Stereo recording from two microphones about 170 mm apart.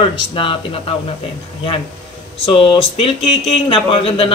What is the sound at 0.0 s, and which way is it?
Speech, 30° left (ahead or behind).